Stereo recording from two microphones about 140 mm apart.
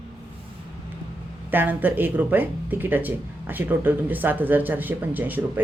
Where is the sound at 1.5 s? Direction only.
15° right (ahead or behind).